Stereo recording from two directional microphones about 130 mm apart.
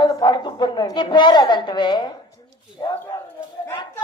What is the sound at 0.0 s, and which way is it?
A woman's voice, 35° left (ahead or behind).